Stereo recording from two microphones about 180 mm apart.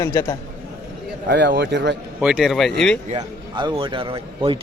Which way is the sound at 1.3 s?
75° right (ahead or behind).